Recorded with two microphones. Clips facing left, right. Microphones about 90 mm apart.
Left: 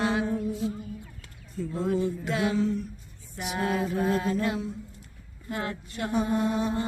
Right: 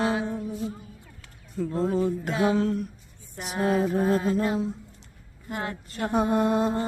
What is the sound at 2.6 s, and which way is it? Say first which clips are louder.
Speech: right 1 dB; 60° right (ahead or behind).